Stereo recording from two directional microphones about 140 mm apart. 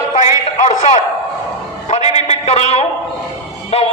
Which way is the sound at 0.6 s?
60° left (ahead or behind).